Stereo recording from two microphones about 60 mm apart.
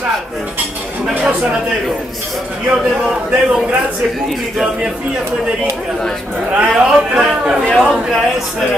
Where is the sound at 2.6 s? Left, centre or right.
Centre.